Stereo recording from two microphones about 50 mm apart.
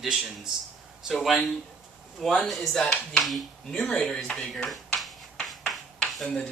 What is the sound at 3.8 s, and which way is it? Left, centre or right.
Speech, centre.